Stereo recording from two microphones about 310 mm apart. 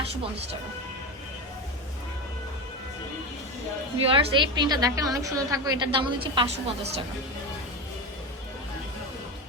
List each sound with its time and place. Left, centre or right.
0.0 s speech: centre
4.0 s a woman's voice: centre